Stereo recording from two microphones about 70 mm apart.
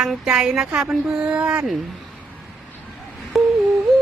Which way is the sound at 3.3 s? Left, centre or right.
Centre.